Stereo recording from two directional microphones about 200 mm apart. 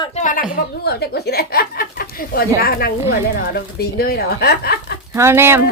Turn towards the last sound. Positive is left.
turn(degrees=-10)  # may be behind; listen again after turning